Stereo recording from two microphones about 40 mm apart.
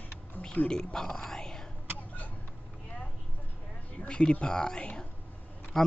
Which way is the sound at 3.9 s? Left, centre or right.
Left.